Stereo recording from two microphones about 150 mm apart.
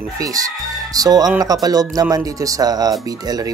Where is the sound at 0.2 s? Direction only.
25° right (ahead or behind).